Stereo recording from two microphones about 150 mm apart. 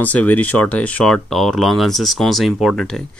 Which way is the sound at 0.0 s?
10° left (ahead or behind).